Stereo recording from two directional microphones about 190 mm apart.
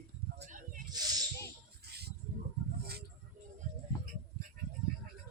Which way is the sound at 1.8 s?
55° right (ahead or behind).